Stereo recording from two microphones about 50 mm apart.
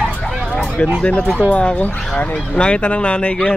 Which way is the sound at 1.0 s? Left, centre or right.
Left.